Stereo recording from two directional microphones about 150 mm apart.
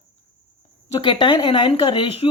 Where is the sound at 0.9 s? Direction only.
30° left (ahead or behind).